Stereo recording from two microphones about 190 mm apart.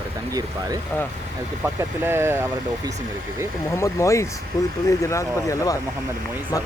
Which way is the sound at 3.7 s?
15° left (ahead or behind).